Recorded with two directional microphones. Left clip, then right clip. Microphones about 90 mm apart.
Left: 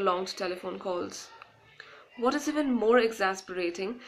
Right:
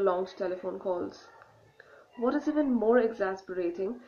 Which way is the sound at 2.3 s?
15° right (ahead or behind).